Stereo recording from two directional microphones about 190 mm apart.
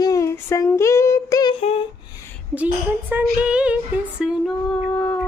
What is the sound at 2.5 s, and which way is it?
Speech, 10° right (ahead or behind).